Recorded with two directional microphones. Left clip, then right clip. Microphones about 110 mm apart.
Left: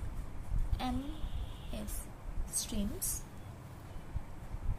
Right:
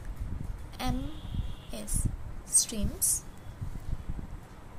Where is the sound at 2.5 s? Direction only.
30° right (ahead or behind).